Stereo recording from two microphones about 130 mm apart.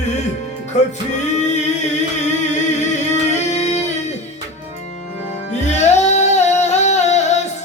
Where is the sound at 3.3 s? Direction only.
60° left (ahead or behind).